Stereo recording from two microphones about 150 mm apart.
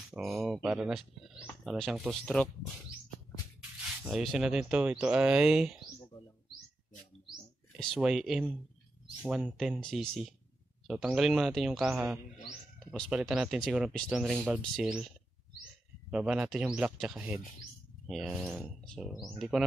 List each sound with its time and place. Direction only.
0.1 s speech: centre (ahead or behind)
4.0 s speech: centre (ahead or behind)
7.7 s speech: centre (ahead or behind)
13.1 s speech: 5° right (ahead or behind)